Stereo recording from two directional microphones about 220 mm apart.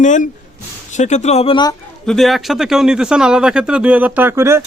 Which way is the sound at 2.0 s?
Centre (ahead or behind).